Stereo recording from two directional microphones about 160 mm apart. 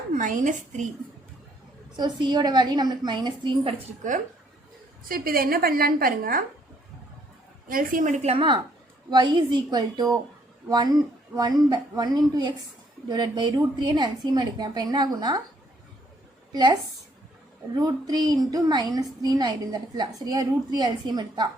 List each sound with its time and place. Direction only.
0.1 s a woman's voice: 50° right (ahead or behind)
2.0 s a woman's voice: 30° right (ahead or behind)
5.0 s a woman's voice: 65° right (ahead or behind)
7.7 s a woman's voice: 60° right (ahead or behind); by 15.4 s 25° right (ahead or behind)
16.5 s a woman's voice: 25° right (ahead or behind)
17.7 s a woman's voice: 25° right (ahead or behind)